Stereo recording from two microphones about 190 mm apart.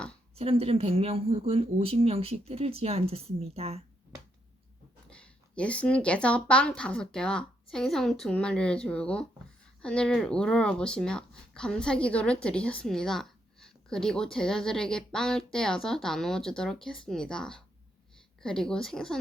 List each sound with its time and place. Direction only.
0.3 s speech: 30° right (ahead or behind)
5.0 s speech: 5° left (ahead or behind)